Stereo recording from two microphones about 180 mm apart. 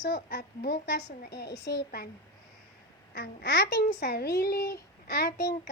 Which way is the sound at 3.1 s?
60° left (ahead or behind).